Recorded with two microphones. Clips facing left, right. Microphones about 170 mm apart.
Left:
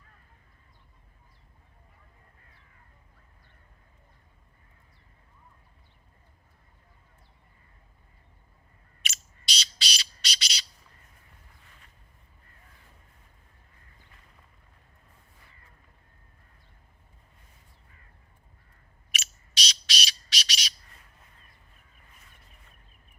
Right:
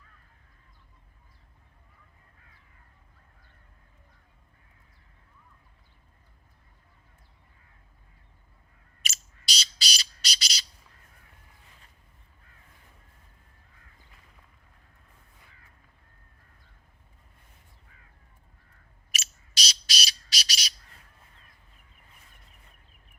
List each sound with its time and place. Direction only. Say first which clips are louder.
9.0 s bird: even; 40° right (ahead or behind)
19.5 s bird: left 1 dB; 40° right (ahead or behind)